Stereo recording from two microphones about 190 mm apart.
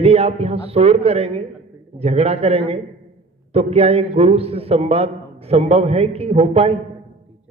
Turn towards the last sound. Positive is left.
turn(degrees=-30)  # may be behind; listen again after turning